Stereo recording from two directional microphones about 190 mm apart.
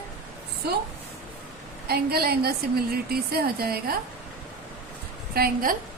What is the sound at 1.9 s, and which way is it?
A woman's voice, 55° right (ahead or behind).